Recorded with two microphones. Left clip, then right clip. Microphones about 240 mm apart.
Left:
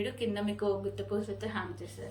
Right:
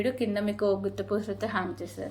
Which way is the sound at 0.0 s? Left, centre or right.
Centre.